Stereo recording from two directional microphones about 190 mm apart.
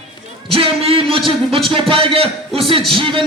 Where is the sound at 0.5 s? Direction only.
30° right (ahead or behind).